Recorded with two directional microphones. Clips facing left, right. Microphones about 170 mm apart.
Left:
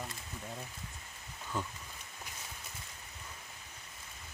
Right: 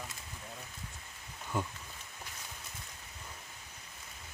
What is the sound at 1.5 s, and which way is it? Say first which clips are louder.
Speech: right 3 dB; 10° right (ahead or behind).